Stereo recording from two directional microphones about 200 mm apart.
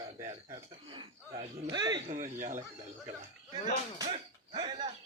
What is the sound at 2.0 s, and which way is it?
Speech, 35° right (ahead or behind).